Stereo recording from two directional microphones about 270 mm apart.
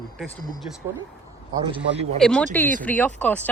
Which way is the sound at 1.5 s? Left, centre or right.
Centre.